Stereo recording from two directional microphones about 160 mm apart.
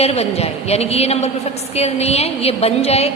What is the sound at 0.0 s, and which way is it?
A woman's voice, 40° left (ahead or behind).